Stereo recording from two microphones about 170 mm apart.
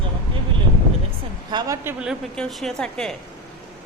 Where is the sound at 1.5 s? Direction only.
20° right (ahead or behind).